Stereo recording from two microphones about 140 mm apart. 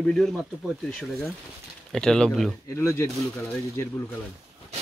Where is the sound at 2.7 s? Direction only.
20° left (ahead or behind).